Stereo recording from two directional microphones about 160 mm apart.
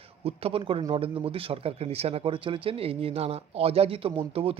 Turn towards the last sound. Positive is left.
turn(degrees=-35)  # may be behind; listen again after turning